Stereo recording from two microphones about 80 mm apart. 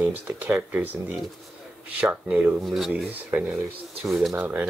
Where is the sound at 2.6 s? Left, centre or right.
Centre.